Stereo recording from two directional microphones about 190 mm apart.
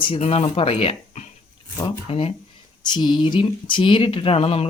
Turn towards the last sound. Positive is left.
turn(degrees=30)  # may be behind; listen again after turning